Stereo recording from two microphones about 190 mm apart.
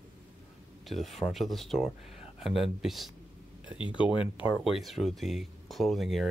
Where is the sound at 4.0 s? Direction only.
25° left (ahead or behind).